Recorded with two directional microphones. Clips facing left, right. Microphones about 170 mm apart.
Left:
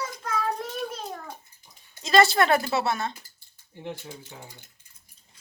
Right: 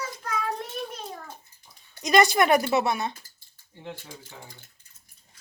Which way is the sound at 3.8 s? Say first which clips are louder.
Left 3 dB; 20° left (ahead or behind).